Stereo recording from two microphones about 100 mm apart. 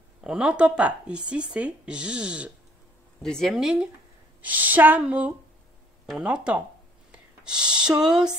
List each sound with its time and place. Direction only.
0.2 s speech: 10° right (ahead or behind)
3.2 s speech: 5° left (ahead or behind)
4.4 s speech: 15° right (ahead or behind)
7.1 s a sound: 10° right (ahead or behind)
8.0 s speech: 5° right (ahead or behind)